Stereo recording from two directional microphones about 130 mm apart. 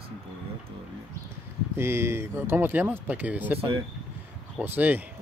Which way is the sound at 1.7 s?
20° right (ahead or behind).